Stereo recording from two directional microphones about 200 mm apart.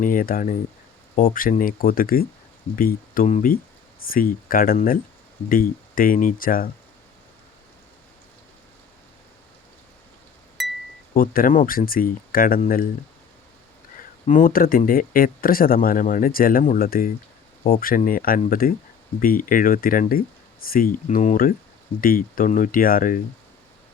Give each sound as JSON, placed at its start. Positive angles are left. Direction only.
{"t": 0.0, "sound": "speech", "side_deg": 45}
{"t": 10.6, "sound": "a sound", "side_deg": 0}
{"t": 11.1, "sound": "speech", "side_deg": 45}
{"t": 14.3, "sound": "speech", "side_deg": 40}